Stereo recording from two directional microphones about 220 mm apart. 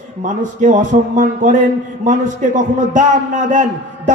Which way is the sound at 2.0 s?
35° right (ahead or behind).